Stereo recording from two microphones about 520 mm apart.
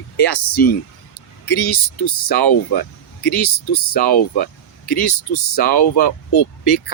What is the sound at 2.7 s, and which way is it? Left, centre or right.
Speech, centre.